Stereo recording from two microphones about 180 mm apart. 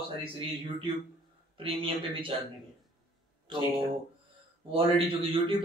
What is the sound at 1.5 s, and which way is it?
Speech, 30° right (ahead or behind).